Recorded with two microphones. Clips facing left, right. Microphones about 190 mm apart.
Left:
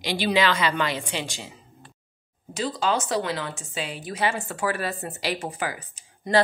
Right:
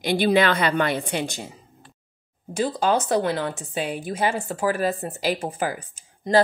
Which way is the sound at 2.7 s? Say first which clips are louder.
Right 3 dB; 55° right (ahead or behind).